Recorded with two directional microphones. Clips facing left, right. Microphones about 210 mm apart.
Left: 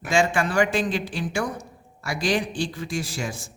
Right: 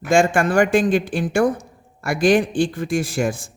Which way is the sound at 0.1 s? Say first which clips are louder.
Right 6 dB; 50° right (ahead or behind).